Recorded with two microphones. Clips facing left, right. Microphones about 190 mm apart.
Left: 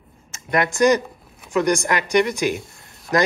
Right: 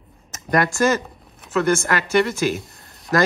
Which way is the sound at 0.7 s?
15° left (ahead or behind).